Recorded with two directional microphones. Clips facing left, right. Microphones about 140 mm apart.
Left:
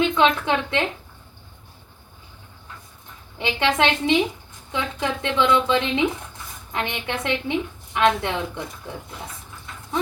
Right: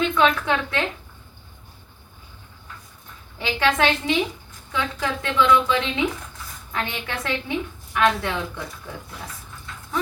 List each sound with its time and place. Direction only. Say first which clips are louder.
0.0 s a woman's voice: left 1 dB; 25° left (ahead or behind)
3.3 s a woman's voice: even; 20° left (ahead or behind)